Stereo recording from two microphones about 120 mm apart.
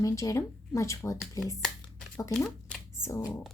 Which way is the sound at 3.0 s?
25° left (ahead or behind).